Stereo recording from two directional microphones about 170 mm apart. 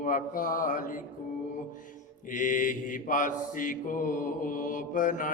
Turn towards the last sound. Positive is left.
turn(degrees=50)  # may be behind; listen again after turning